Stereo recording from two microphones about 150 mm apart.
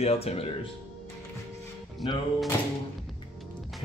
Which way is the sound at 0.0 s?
40° left (ahead or behind).